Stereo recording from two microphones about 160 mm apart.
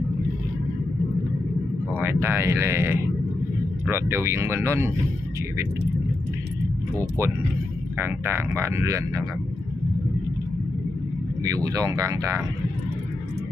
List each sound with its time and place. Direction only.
1.9 s speech: 15° right (ahead or behind)
8.0 s speech: 15° right (ahead or behind)
11.4 s speech: 20° right (ahead or behind)